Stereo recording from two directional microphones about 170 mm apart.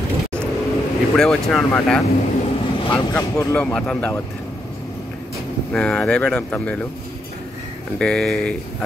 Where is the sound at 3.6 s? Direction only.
5° left (ahead or behind).